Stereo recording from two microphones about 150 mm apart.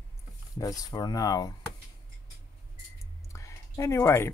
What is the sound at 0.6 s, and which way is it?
Speech, 25° left (ahead or behind).